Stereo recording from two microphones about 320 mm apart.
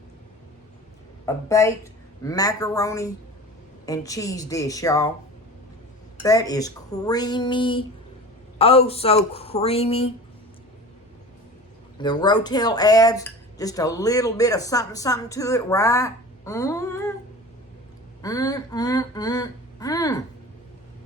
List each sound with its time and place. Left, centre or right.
1.2 s a woman's voice: centre
6.2 s speech: centre
11.9 s speech: centre
18.2 s speech: centre